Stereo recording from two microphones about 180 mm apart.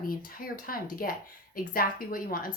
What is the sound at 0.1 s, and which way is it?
A woman's voice, 55° left (ahead or behind).